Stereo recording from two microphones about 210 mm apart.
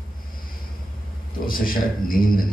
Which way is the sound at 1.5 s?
45° left (ahead or behind).